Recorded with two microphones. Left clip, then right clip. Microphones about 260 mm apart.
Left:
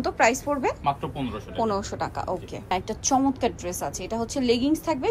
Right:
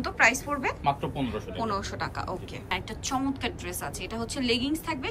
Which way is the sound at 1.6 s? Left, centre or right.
Centre.